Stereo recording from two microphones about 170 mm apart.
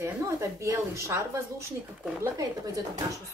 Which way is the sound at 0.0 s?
15° right (ahead or behind).